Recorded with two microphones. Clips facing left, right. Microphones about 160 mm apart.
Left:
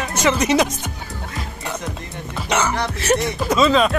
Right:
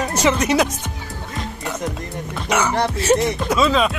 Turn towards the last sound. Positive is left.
turn(degrees=-5)  # may be behind; listen again after turning